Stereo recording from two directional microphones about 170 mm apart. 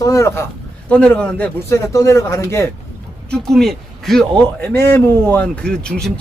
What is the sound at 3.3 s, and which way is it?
A man's voice, centre (ahead or behind).